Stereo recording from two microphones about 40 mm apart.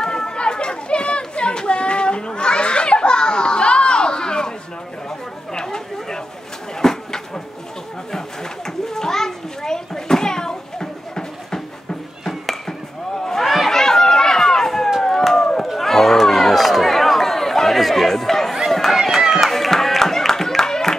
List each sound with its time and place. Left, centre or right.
0.0 s chatter: centre
6.8 s a sound: centre
8.6 s children playing: centre
12.3 s chop: centre
13.2 s run: centre
15.3 s chop: centre
15.6 s a sound: centre
18.7 s run: centre
19.5 s a sound: centre